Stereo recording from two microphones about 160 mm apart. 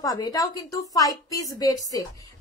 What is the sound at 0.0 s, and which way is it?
A woman's voice, 25° left (ahead or behind).